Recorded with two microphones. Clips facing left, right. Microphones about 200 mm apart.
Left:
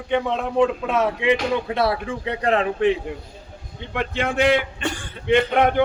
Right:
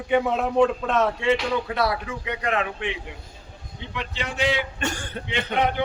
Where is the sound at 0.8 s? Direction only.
10° left (ahead or behind).